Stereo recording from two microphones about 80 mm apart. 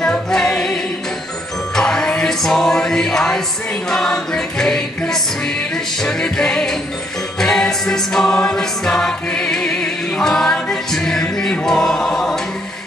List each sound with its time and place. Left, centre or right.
0.0 s music: centre
1.8 s music: centre